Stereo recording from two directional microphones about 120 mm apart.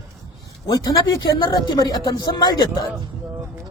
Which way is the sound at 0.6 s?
30° left (ahead or behind).